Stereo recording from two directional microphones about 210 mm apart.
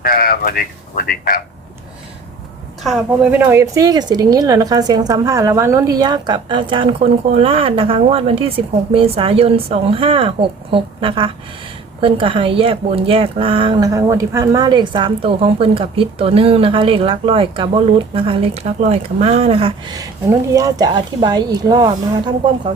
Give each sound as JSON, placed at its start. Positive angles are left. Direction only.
{"t": 0.0, "sound": "a man's voice", "side_deg": 45}
{"t": 2.8, "sound": "a woman's voice", "side_deg": -5}